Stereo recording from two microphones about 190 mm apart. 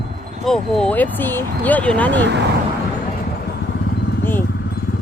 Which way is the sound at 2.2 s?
65° right (ahead or behind).